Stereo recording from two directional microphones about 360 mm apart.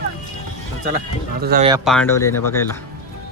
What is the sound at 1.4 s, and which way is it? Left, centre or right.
Speech, right.